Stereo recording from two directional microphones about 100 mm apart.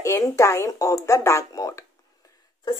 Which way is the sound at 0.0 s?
30° left (ahead or behind).